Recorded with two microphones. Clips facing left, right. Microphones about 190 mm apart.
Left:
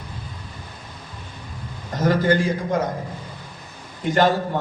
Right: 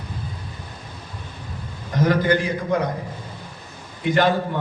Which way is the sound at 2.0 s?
45° left (ahead or behind).